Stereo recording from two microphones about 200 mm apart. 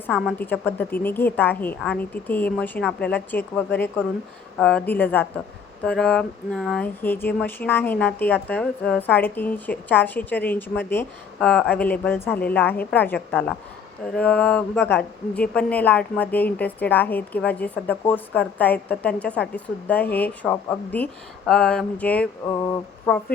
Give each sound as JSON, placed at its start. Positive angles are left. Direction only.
{"t": 0.1, "sound": "a woman's voice", "side_deg": 5}
{"t": 4.6, "sound": "speech", "side_deg": 5}